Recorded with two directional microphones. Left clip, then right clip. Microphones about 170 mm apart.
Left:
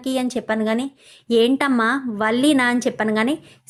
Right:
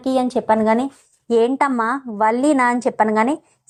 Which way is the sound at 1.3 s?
30° left (ahead or behind).